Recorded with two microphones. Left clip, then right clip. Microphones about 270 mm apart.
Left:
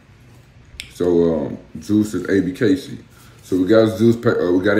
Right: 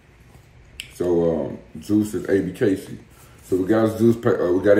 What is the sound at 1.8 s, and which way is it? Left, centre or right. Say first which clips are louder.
Speech: left 3 dB; centre.